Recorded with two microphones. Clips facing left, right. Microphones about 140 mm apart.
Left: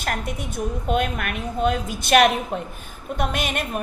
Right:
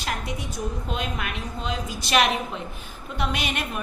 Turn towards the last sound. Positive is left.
turn(degrees=45)  # may be behind; listen again after turning